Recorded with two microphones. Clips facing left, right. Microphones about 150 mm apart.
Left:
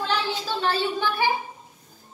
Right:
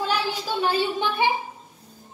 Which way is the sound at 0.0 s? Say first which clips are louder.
Right 1 dB; 10° right (ahead or behind).